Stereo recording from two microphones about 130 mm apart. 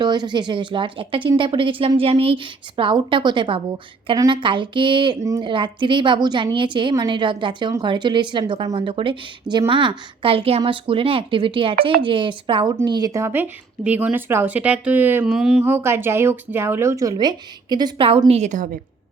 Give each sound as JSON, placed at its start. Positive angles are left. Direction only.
{"t": 0.0, "sound": "a woman's voice", "side_deg": -35}
{"t": 15.3, "sound": "speech", "side_deg": -5}
{"t": 15.6, "sound": "speech", "side_deg": -20}
{"t": 18.3, "sound": "a woman's voice", "side_deg": -60}